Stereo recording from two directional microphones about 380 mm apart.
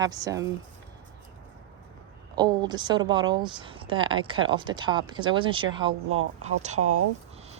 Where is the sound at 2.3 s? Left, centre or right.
Centre.